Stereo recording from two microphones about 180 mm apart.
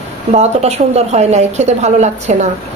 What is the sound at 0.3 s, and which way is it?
A woman's voice, 35° right (ahead or behind).